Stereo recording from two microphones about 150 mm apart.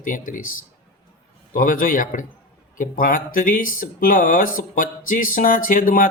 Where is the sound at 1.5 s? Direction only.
70° left (ahead or behind).